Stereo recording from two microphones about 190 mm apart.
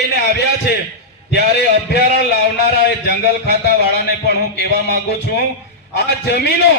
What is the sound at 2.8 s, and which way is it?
Speech, 60° left (ahead or behind).